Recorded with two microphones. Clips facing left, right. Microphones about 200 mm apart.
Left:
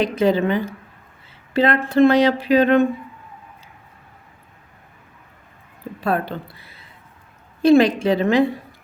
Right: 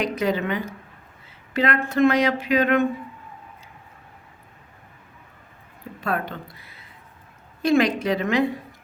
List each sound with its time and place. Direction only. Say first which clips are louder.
0.0 s speech: left 6 dB; 30° left (ahead or behind)
6.0 s speech: left 5 dB; 30° left (ahead or behind)